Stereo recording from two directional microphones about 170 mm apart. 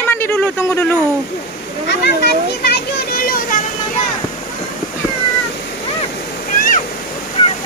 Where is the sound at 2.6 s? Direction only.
70° left (ahead or behind).